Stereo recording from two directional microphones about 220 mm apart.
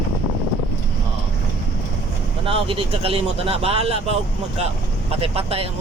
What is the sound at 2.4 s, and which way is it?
Speech, 25° right (ahead or behind).